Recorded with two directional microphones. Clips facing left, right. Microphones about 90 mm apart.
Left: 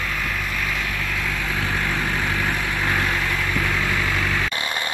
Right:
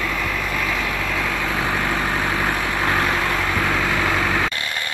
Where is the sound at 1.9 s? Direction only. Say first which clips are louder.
Right 3 dB; 40° right (ahead or behind).